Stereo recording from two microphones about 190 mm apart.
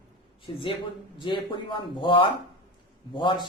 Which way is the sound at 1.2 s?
25° left (ahead or behind).